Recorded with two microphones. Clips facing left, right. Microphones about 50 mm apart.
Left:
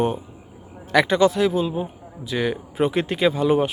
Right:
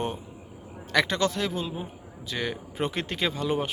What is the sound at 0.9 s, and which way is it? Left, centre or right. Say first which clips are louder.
A man's voice: left 8 dB; centre.